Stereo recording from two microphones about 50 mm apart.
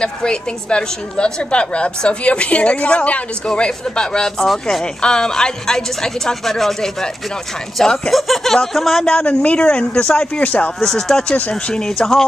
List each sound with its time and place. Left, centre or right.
0.0 s a woman's voice: centre
4.5 s speech: centre
5.0 s a woman's voice: centre
9.2 s a woman's voice: left
10.8 s a woman's voice: centre